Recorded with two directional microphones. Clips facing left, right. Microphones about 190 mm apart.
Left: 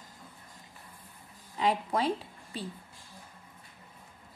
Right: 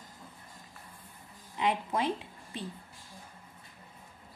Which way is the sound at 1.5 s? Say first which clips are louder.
Left 2 dB; 35° left (ahead or behind).